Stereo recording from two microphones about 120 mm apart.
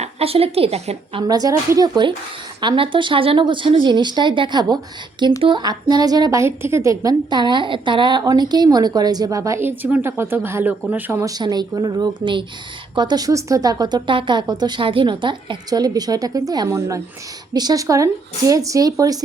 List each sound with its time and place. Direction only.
0.0 s a woman's voice: 55° right (ahead or behind)
1.3 s a woman's voice: 30° right (ahead or behind)
6.4 s a woman's voice: 20° right (ahead or behind)
11.3 s a woman's voice: 35° right (ahead or behind)